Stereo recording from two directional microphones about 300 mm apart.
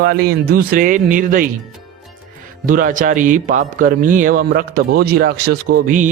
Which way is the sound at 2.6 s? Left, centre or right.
Right.